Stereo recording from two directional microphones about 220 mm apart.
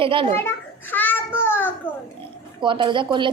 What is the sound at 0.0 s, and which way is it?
Speech, 25° right (ahead or behind).